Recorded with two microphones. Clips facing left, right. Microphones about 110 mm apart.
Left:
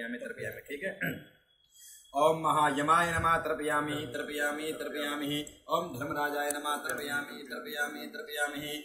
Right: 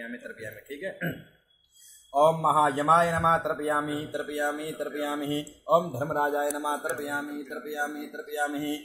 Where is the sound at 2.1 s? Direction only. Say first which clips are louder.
Right 5 dB; 25° right (ahead or behind).